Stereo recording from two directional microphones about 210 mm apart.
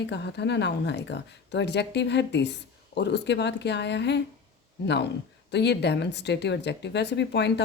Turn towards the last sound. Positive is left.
turn(degrees=55)  # may be behind; listen again after turning